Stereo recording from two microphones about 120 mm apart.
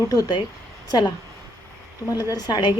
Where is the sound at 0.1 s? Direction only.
35° left (ahead or behind).